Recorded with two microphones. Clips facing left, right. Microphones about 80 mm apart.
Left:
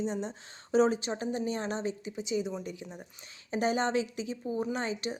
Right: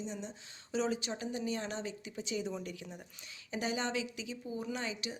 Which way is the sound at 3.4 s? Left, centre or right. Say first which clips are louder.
Left 7 dB; left.